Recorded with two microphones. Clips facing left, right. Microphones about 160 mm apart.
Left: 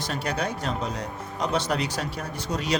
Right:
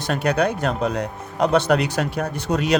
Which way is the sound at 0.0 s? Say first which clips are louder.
Right 8 dB; 60° right (ahead or behind).